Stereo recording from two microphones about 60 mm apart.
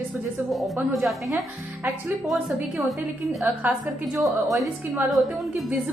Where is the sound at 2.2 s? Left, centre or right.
Centre.